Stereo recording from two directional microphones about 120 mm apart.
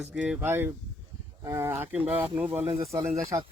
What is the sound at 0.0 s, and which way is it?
Speech, 10° right (ahead or behind).